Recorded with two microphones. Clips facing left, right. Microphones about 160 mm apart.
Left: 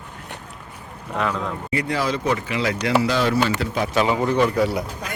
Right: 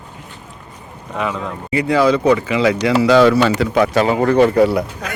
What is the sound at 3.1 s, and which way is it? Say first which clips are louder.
Speech: right 9 dB; 85° right.